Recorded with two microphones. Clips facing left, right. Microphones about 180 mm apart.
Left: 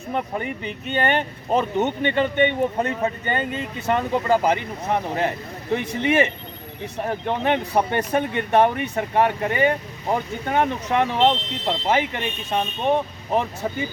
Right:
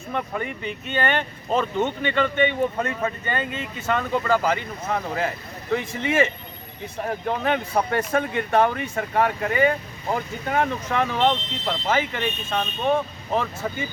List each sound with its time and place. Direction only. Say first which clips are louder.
0.1 s speech: left 2 dB; 20° left (ahead or behind)